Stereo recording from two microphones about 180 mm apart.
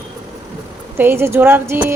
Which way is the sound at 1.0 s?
15° right (ahead or behind).